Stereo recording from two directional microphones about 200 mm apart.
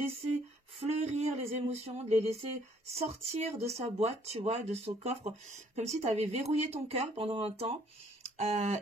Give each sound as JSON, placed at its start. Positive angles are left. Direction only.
{"t": 0.7, "sound": "speech", "side_deg": -35}